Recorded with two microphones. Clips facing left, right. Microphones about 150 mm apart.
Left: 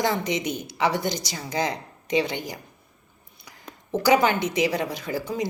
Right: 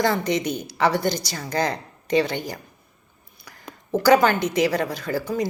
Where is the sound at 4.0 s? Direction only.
20° left (ahead or behind).